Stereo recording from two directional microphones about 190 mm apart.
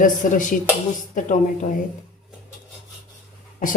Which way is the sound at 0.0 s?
45° left (ahead or behind).